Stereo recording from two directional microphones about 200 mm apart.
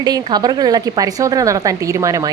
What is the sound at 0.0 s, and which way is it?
A woman's voice, 20° right (ahead or behind).